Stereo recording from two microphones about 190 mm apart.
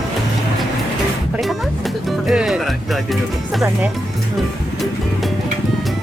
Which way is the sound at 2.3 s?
Centre (ahead or behind).